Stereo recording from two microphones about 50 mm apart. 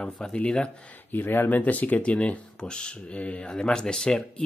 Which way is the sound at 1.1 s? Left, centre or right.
Left.